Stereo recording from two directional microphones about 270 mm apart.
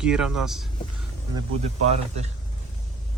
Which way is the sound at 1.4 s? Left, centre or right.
Right.